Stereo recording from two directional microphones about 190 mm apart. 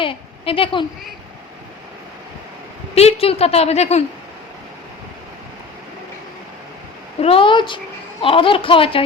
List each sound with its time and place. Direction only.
0.0 s a woman's voice: 30° left (ahead or behind)
2.9 s a woman's voice: 35° left (ahead or behind)
7.2 s speech: 30° left (ahead or behind)